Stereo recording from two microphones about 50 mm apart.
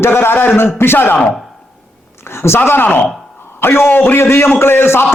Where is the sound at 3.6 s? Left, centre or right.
Left.